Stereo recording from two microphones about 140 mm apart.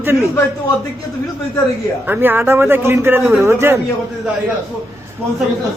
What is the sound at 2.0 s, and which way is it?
A man's voice, 15° right (ahead or behind).